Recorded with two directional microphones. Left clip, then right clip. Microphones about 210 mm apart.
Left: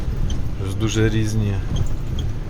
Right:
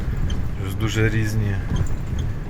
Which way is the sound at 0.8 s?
5° left (ahead or behind).